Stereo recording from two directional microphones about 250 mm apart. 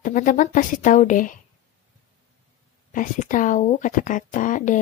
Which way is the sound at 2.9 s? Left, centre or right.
Left.